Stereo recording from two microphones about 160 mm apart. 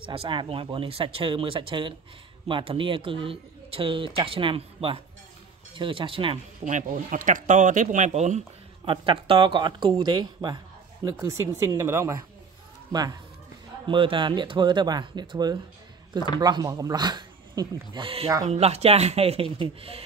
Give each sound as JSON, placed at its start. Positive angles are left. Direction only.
{"t": 0.0, "sound": "speech", "side_deg": -35}
{"t": 6.6, "sound": "speech", "side_deg": -55}
{"t": 8.9, "sound": "speech", "side_deg": -30}